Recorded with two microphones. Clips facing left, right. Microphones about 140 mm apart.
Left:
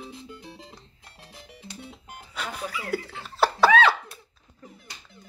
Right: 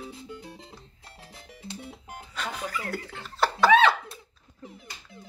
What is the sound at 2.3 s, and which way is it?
Speech, 5° left (ahead or behind).